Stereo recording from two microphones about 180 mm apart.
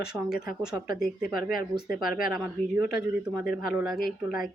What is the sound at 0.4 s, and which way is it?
Speech, 5° right (ahead or behind).